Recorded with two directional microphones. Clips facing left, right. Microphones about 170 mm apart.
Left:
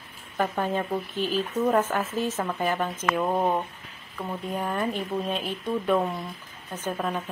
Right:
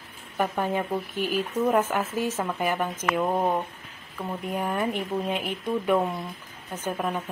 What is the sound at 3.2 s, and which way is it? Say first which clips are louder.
Speech: even; centre (ahead or behind).